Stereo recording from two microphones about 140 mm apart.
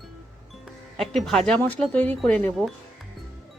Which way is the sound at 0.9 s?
Centre (ahead or behind).